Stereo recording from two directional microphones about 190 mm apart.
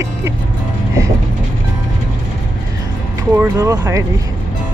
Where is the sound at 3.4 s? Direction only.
15° right (ahead or behind).